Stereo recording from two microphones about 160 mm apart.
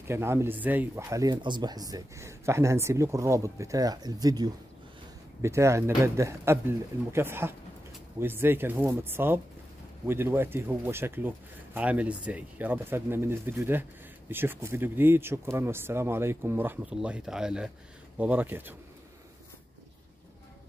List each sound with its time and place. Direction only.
0.0 s speech: 15° right (ahead or behind)